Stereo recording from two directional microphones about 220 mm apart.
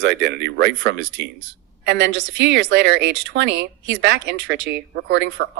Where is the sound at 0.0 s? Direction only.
50° right (ahead or behind).